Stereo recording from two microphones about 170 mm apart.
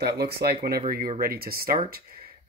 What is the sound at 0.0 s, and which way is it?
Speech, 70° right (ahead or behind).